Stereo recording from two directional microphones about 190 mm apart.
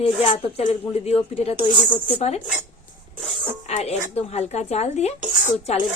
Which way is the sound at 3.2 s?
30° right (ahead or behind).